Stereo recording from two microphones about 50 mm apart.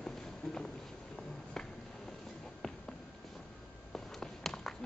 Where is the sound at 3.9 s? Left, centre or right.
Centre.